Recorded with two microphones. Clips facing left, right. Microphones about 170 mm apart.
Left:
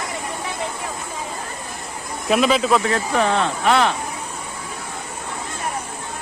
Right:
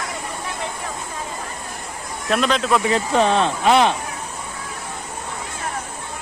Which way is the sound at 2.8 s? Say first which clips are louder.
Right 2 dB; 20° right (ahead or behind).